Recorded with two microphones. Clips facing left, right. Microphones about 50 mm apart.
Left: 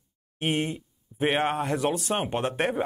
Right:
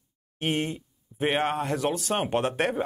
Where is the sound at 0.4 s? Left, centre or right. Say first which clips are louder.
Left 1 dB; centre.